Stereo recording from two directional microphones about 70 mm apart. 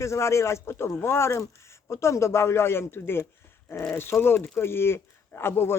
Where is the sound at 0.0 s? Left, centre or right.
Left.